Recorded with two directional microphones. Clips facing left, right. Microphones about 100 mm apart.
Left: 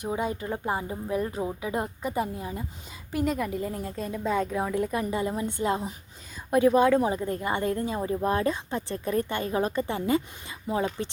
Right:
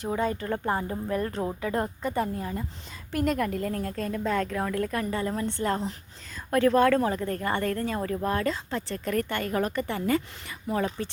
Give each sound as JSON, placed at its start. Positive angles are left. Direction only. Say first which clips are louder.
{"t": 0.0, "sound": "a woman's voice", "louder": "right 1 dB", "side_deg": 15}